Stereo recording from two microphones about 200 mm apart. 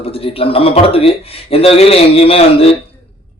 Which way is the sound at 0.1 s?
30° left (ahead or behind).